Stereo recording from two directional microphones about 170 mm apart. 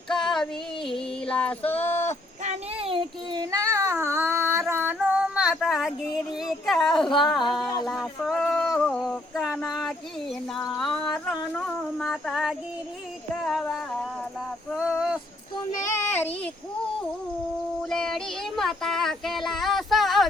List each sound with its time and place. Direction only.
0.1 s female singing: 5° left (ahead or behind)
1.3 s a sound: 10° left (ahead or behind)
2.4 s child singing: 40° right (ahead or behind); by 4.6 s 15° right (ahead or behind)
4.7 s female singing: 10° right (ahead or behind)
7.2 s a sound: centre (ahead or behind)
16.0 s child singing: 10° left (ahead or behind)
17.8 s child singing: 5° left (ahead or behind)